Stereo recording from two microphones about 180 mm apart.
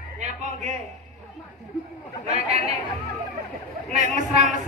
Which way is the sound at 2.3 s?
35° right (ahead or behind).